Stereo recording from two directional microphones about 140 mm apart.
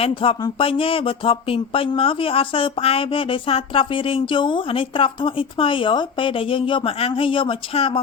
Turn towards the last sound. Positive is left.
turn(degrees=40)  # may be behind; listen again after turning